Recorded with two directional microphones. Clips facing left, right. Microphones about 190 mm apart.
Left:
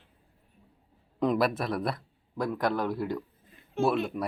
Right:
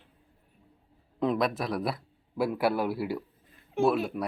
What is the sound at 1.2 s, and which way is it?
Speech, centre (ahead or behind).